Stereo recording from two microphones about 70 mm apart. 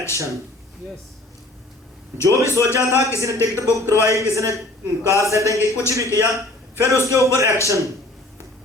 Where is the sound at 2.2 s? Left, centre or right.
Left.